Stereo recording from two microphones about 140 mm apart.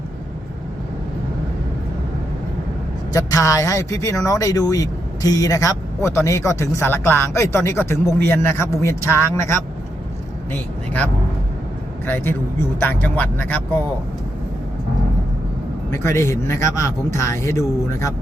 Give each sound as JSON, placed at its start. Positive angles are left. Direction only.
{"t": 3.1, "sound": "speech", "side_deg": 25}
{"t": 15.9, "sound": "speech", "side_deg": 20}